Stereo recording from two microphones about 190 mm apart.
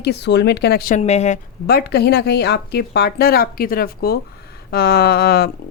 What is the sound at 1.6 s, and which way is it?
A woman's voice, 55° left (ahead or behind).